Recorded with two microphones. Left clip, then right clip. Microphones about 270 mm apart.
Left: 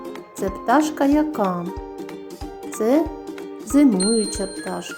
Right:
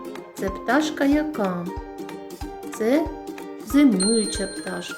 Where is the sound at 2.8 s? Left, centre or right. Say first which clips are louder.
Left 3 dB; centre.